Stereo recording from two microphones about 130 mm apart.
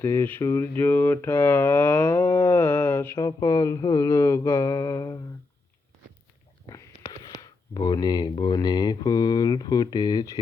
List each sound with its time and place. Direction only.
0.0 s a sound: 20° left (ahead or behind)
3.2 s mantra: 30° left (ahead or behind)
6.7 s speech: 25° left (ahead or behind)